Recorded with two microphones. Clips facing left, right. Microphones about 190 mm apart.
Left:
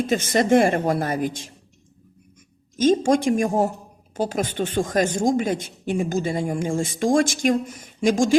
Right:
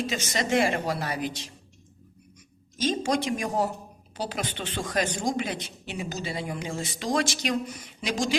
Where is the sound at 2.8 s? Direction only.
50° left (ahead or behind).